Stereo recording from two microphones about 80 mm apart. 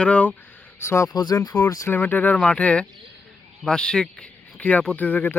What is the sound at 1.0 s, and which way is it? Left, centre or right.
Speech, left.